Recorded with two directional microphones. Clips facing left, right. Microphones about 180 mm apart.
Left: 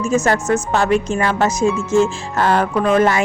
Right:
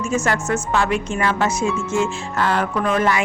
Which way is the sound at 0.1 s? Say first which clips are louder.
Left 5 dB; 40° left (ahead or behind).